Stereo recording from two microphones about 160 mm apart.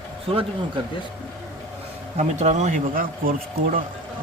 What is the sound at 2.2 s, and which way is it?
Speech, 45° right (ahead or behind).